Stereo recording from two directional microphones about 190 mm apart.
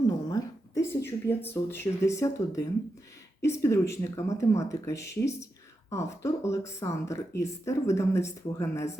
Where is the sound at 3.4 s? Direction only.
15° left (ahead or behind).